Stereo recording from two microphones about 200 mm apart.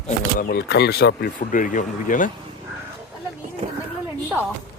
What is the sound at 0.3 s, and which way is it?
Speech, 50° left (ahead or behind).